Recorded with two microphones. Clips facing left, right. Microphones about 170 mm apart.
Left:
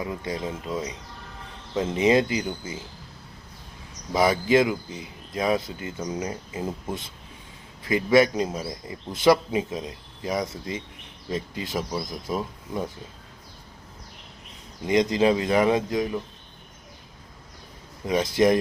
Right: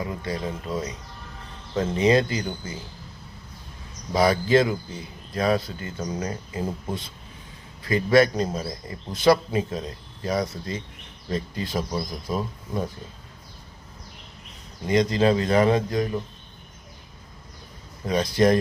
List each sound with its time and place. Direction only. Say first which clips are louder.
0.0 s speech: even; 15° left (ahead or behind)
4.1 s speech: right 1 dB; 20° left (ahead or behind)
7.9 s a man's voice: right 1 dB; 20° left (ahead or behind)
14.8 s speech: even; 15° left (ahead or behind)
18.1 s speech: even; 15° left (ahead or behind)